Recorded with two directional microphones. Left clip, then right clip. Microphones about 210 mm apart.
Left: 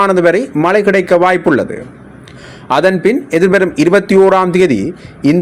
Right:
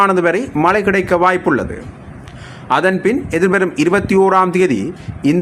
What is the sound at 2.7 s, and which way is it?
A man's voice, 15° left (ahead or behind).